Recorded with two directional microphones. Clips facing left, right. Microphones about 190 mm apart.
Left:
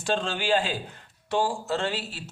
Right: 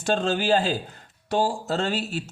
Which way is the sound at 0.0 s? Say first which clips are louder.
Right 4 dB; 45° right (ahead or behind).